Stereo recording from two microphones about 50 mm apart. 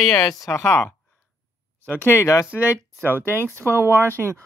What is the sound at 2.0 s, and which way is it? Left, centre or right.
Speech, left.